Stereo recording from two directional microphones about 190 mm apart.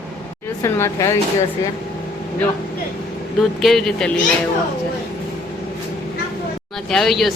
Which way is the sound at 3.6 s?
Centre (ahead or behind).